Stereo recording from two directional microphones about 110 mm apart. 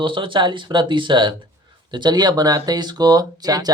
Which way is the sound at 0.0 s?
50° right (ahead or behind).